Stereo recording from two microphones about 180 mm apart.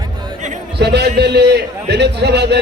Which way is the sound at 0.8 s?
70° right (ahead or behind).